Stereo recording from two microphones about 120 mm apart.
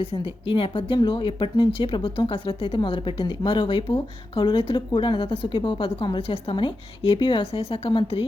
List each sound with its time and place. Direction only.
0.0 s speech: 50° left (ahead or behind)